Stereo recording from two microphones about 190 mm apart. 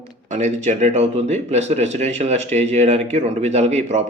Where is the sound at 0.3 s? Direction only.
40° right (ahead or behind).